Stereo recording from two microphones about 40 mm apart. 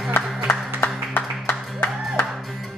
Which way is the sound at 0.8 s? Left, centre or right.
Left.